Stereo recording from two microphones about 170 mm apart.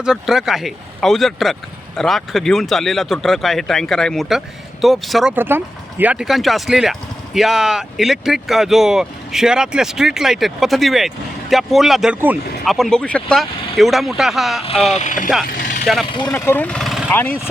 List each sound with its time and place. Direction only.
0.0 s speech: 5° right (ahead or behind)
5.3 s speech: 10° right (ahead or behind)
12.6 s speech: centre (ahead or behind)
14.9 s speech: 50° left (ahead or behind)
15.4 s vehicle: 55° left (ahead or behind)
16.1 s speech: 20° left (ahead or behind); by 17.1 s centre (ahead or behind)
17.1 s speech: 10° left (ahead or behind)